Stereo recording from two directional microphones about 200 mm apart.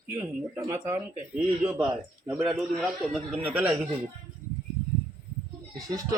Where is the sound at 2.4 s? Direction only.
Centre (ahead or behind).